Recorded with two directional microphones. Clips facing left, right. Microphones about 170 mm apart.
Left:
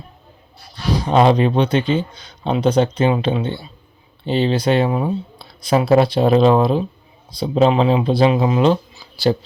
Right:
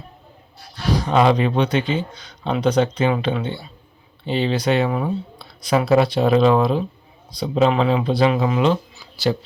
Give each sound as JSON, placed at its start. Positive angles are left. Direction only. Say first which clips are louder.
{"t": 1.0, "sound": "speech", "louder": "left 3 dB", "side_deg": 30}